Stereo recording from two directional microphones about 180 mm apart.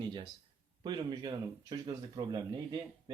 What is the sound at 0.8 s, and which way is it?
Speech, 25° right (ahead or behind).